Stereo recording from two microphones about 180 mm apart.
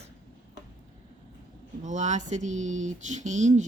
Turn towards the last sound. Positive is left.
turn(degrees=-40)  # may be behind; listen again after turning